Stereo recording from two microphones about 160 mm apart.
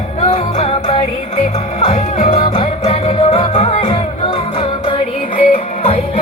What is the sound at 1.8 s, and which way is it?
Music, 50° left (ahead or behind).